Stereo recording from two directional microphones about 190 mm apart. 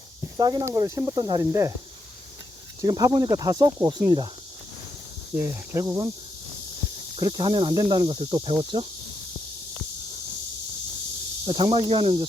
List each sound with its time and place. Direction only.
0.3 s speech: 20° right (ahead or behind)
2.8 s speech: 20° right (ahead or behind)
5.3 s speech: 10° right (ahead or behind)
7.2 s speech: 20° right (ahead or behind)
11.4 s speech: 25° right (ahead or behind)